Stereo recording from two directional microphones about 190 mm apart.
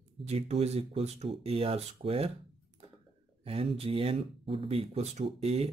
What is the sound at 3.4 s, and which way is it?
Speech, 30° right (ahead or behind).